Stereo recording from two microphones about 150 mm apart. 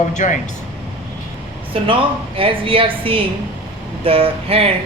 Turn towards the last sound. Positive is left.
turn(degrees=-40)  # may be behind; listen again after turning